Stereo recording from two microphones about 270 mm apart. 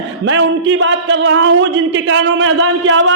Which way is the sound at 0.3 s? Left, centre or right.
Right.